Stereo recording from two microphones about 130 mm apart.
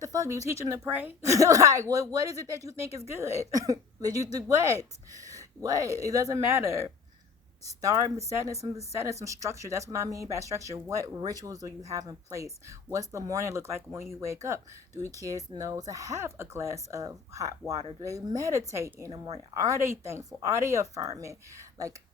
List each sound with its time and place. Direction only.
0.0 s speech: 25° right (ahead or behind)
1.3 s speech: 25° right (ahead or behind)
5.1 s a sound: 25° right (ahead or behind)
5.6 s speech: 25° right (ahead or behind)